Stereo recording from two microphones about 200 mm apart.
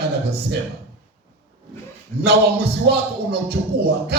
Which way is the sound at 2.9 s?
55° right (ahead or behind).